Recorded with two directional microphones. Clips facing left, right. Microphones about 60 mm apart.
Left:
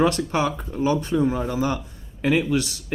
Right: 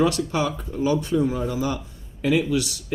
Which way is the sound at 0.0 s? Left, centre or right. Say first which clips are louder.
Left 1 dB; left.